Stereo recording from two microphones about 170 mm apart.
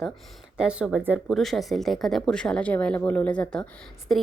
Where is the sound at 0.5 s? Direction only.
5° right (ahead or behind).